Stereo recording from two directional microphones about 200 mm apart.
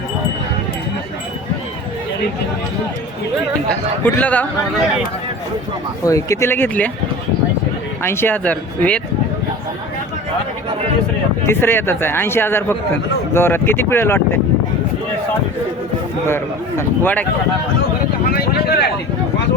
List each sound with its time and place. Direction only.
4.0 s speech: 5° left (ahead or behind)
6.0 s speech: 15° left (ahead or behind)
8.0 s speech: 10° left (ahead or behind)
11.4 s speech: 10° left (ahead or behind)
16.2 s speech: 10° left (ahead or behind)
18.3 s a sound: 50° left (ahead or behind)